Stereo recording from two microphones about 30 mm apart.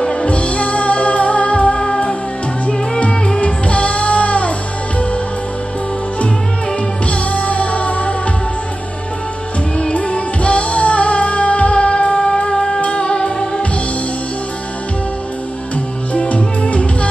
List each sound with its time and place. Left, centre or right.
0.0 s music: left
3.3 s music: left
7.1 s music: left
9.9 s music: left
12.1 s music: centre
12.8 s music: left
13.1 s music: left
16.1 s music: left